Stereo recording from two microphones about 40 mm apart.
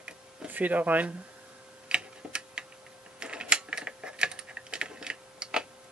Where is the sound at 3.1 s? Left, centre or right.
Right.